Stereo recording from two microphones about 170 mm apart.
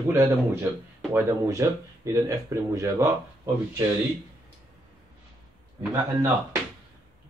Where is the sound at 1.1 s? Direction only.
20° right (ahead or behind).